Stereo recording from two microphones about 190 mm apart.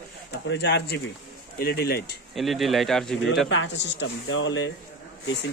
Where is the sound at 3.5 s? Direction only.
75° left (ahead or behind).